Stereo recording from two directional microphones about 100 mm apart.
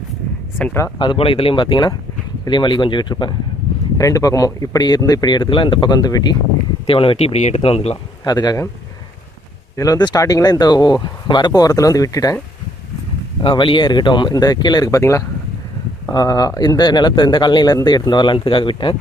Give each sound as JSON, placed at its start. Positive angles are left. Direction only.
{"t": 0.9, "sound": "speech", "side_deg": 55}
{"t": 3.9, "sound": "speech", "side_deg": 35}
{"t": 6.8, "sound": "speech", "side_deg": 65}
{"t": 8.2, "sound": "speech", "side_deg": 40}
{"t": 9.7, "sound": "speech", "side_deg": 35}
{"t": 13.4, "sound": "speech", "side_deg": 60}
{"t": 14.8, "sound": "speech", "side_deg": 30}